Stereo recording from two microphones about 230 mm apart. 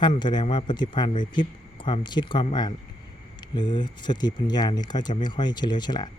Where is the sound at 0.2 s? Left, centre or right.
Centre.